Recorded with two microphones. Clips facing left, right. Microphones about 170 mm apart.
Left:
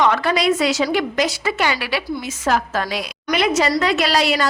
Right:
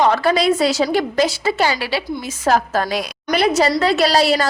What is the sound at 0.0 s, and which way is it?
A woman's voice, 35° right (ahead or behind).